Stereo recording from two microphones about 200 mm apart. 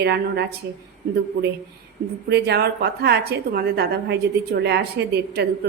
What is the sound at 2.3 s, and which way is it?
A woman's voice, 55° right (ahead or behind).